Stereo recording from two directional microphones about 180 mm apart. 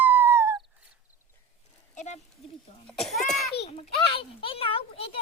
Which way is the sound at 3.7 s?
30° left (ahead or behind).